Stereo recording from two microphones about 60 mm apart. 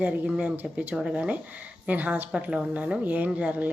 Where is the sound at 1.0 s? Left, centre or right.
Centre.